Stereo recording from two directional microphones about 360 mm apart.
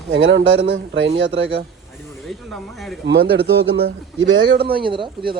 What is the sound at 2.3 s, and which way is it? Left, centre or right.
Speech, centre.